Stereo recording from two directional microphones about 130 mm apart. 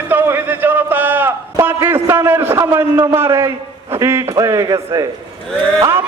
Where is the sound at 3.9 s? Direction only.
20° right (ahead or behind).